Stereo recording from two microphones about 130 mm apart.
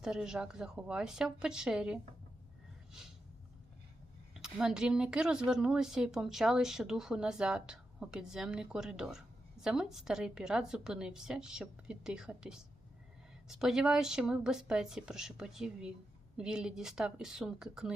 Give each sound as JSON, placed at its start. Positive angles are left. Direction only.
{"t": 0.0, "sound": "speech", "side_deg": -5}
{"t": 4.4, "sound": "a woman's voice", "side_deg": -5}